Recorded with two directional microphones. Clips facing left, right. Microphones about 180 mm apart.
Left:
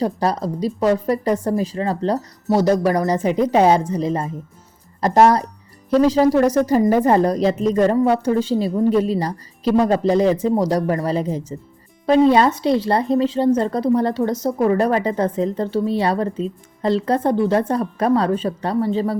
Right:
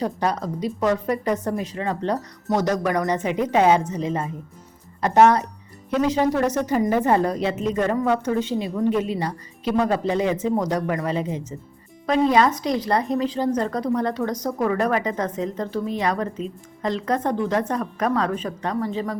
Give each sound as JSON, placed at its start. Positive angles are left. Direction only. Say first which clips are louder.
{"t": 0.0, "sound": "a woman's voice", "louder": "left 4 dB", "side_deg": 35}